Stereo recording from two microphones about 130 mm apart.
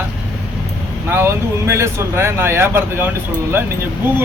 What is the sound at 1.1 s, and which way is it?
Speech, 20° right (ahead or behind).